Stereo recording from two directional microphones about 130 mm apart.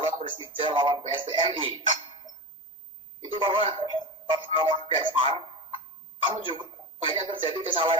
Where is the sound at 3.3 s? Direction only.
45° right (ahead or behind).